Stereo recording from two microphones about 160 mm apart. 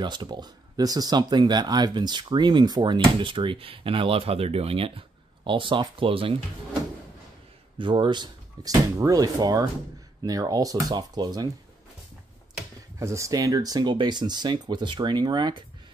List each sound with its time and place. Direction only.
0.0 s speech: 25° right (ahead or behind)
7.8 s speech: 30° right (ahead or behind)
13.0 s speech: 20° right (ahead or behind)